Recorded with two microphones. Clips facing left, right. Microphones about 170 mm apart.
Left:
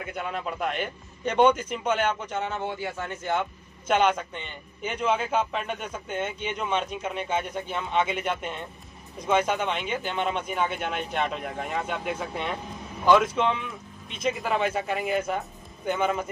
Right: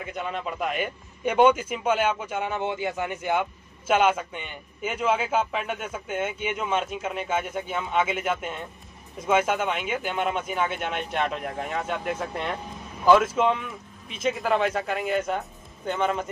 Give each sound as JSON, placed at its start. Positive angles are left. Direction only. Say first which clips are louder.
{"t": 0.0, "sound": "a man's voice", "louder": "right 1 dB", "side_deg": 0}